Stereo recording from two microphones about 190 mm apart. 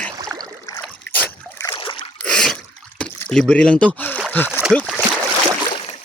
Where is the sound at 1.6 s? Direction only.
25° left (ahead or behind).